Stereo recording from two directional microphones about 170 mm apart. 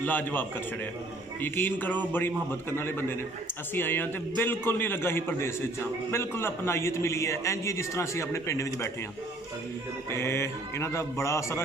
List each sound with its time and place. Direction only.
0.0 s a man's voice: 10° left (ahead or behind)
10.1 s a man's voice: 15° left (ahead or behind)